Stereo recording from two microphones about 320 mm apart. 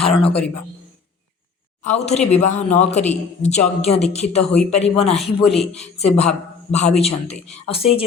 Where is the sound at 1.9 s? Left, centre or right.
Centre.